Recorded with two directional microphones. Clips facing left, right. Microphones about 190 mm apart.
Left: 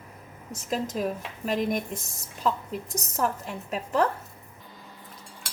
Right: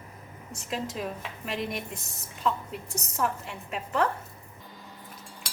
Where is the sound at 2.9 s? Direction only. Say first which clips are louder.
Left 1 dB; 40° left (ahead or behind).